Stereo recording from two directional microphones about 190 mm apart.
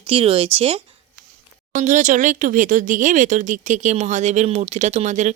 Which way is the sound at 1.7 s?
40° right (ahead or behind).